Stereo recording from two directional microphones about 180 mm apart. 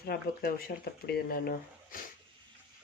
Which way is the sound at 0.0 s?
60° left (ahead or behind).